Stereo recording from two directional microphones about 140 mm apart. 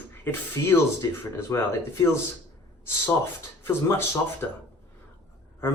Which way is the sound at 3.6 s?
15° left (ahead or behind).